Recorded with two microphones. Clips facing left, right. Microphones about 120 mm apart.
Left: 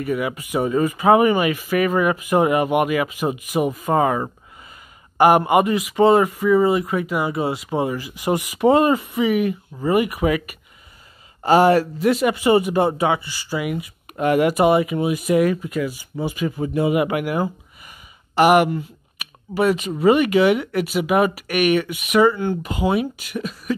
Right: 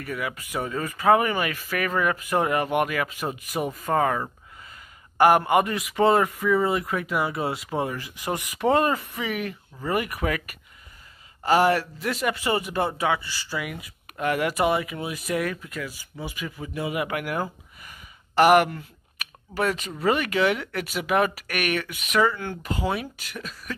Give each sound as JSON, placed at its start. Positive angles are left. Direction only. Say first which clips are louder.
{"t": 0.0, "sound": "speech", "louder": "left 8 dB", "side_deg": 15}
{"t": 11.4, "sound": "speech", "louder": "left 6 dB", "side_deg": 30}
{"t": 12.0, "sound": "speech", "louder": "left 9 dB", "side_deg": 15}
{"t": 16.2, "sound": "speech", "louder": "left 11 dB", "side_deg": 30}